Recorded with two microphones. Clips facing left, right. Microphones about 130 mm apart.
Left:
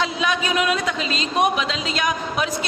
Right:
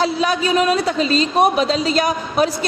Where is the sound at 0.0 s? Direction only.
35° right (ahead or behind).